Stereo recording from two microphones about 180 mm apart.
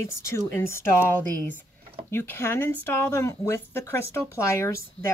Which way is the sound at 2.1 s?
15° left (ahead or behind).